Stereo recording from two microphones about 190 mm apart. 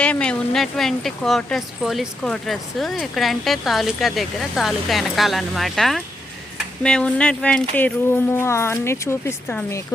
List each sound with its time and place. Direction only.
0.0 s speech: 5° left (ahead or behind)